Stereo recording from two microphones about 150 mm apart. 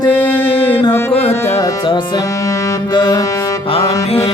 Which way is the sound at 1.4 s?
15° left (ahead or behind).